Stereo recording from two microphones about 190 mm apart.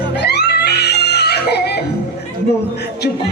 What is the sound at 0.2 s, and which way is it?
Screaming, 60° left (ahead or behind).